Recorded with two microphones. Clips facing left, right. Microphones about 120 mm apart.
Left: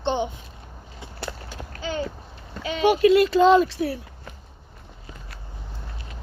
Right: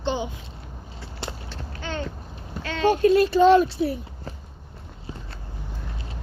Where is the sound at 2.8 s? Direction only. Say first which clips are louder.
Left 1 dB; 90° left.